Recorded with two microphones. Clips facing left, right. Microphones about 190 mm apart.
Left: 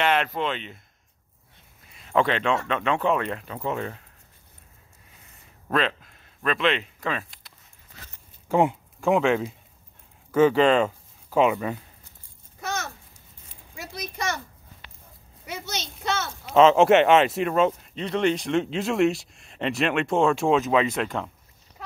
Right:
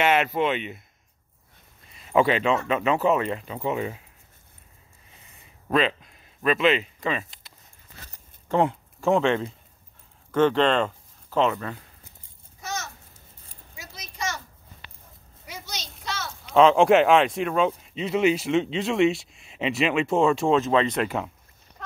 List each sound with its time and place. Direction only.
0.0 s speech: 10° right (ahead or behind)
1.9 s speech: centre (ahead or behind)
5.7 s speech: centre (ahead or behind)
8.5 s speech: 10° left (ahead or behind)
12.5 s a sound: 55° left (ahead or behind)
15.4 s a sound: 65° left (ahead or behind)
16.4 s speech: centre (ahead or behind)